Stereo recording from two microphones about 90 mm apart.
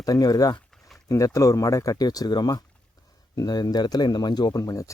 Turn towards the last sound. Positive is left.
turn(degrees=40)  # may be behind; listen again after turning